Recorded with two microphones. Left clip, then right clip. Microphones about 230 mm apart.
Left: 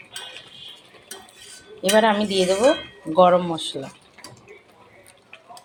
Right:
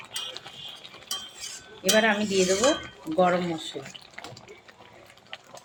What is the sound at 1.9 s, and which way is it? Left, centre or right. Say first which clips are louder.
Speech: left 4 dB; centre.